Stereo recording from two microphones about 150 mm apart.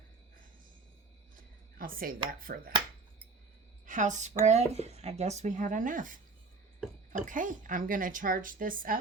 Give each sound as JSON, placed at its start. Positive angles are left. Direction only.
{"t": 1.4, "sound": "a sound", "side_deg": -70}
{"t": 2.4, "sound": "speech", "side_deg": -75}
{"t": 3.8, "sound": "a woman's voice", "side_deg": -55}